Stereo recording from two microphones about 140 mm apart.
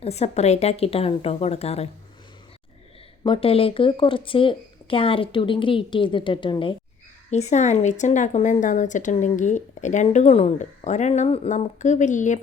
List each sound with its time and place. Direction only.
0.0 s a woman's voice: 50° left (ahead or behind)
3.2 s speech: 40° left (ahead or behind)
7.3 s a woman's voice: 55° left (ahead or behind)